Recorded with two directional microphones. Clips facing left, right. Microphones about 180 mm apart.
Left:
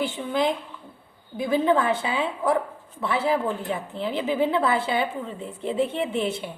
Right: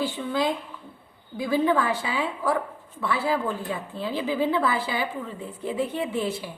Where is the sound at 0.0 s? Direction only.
20° left (ahead or behind).